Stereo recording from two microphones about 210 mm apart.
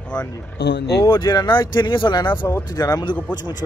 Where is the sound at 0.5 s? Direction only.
55° left (ahead or behind).